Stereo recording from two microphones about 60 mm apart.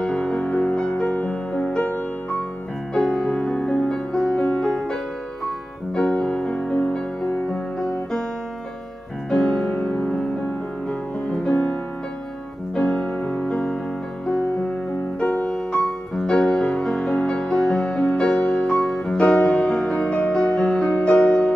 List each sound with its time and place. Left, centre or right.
0.0 s music: centre
2.9 s music: centre
3.3 s music: centre
6.1 s music: left
9.3 s music: centre
15.7 s music: centre
18.4 s music: left
18.7 s music: centre
19.4 s music: left
19.7 s music: centre